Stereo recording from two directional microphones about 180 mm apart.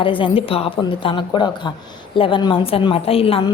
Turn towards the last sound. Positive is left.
turn(degrees=30)  # may be behind; listen again after turning